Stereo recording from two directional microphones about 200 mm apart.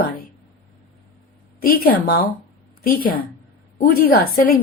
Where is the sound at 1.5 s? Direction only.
45° left (ahead or behind).